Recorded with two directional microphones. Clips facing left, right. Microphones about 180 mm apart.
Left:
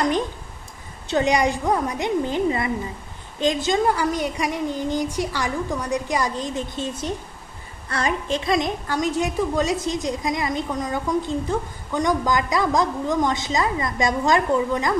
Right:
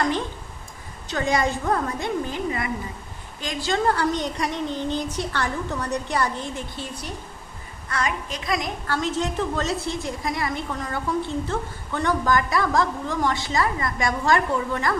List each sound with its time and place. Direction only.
1.0 s a woman's voice: 20° left (ahead or behind)